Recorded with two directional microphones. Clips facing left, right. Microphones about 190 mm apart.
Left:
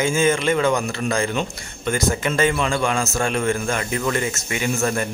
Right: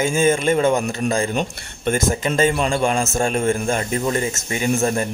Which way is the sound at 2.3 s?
40° right (ahead or behind).